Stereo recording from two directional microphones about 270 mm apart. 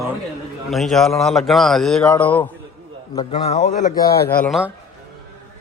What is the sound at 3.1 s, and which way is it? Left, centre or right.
Speech, left.